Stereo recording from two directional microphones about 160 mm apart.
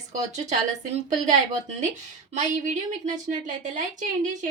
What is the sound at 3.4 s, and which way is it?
Speech, 50° right (ahead or behind).